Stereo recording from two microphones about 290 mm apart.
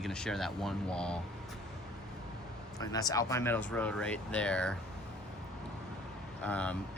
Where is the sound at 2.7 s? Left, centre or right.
Centre.